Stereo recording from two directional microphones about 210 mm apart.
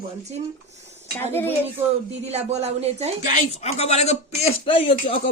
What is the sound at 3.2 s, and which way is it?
Speech, 35° left (ahead or behind).